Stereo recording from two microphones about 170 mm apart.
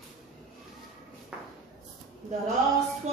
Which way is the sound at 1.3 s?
5° right (ahead or behind).